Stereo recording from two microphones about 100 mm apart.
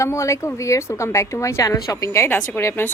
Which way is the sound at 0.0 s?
30° left (ahead or behind).